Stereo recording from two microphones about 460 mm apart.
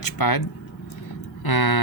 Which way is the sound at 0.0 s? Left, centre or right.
Left.